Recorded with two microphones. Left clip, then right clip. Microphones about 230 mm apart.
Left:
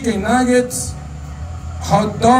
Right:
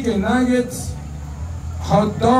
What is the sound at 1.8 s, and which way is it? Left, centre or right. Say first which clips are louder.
Speech: left 2 dB; left.